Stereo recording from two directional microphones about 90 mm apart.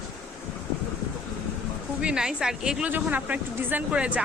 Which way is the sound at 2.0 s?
10° right (ahead or behind).